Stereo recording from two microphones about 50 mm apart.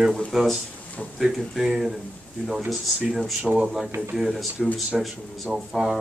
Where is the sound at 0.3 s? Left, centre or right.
Centre.